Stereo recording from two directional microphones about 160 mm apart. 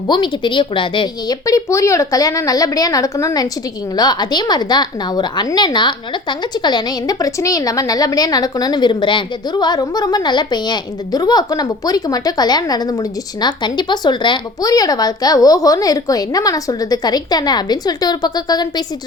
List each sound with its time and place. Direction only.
0.1 s a woman's voice: 30° left (ahead or behind)